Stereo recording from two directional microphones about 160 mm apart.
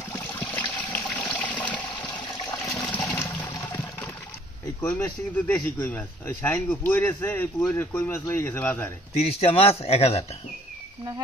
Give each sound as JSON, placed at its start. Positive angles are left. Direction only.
{"t": 0.1, "sound": "water", "side_deg": 10}
{"t": 1.1, "sound": "toilet flush", "side_deg": 10}
{"t": 4.8, "sound": "speech", "side_deg": 10}
{"t": 9.1, "sound": "speech", "side_deg": 40}